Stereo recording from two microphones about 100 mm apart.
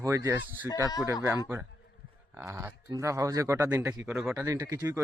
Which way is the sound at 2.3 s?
25° right (ahead or behind).